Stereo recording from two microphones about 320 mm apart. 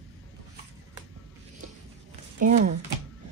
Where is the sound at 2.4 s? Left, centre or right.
Right.